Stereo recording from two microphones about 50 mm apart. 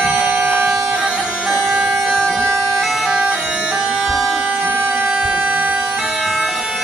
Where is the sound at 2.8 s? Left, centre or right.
Centre.